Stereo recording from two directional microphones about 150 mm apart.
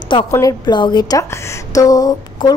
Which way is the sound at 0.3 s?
20° left (ahead or behind).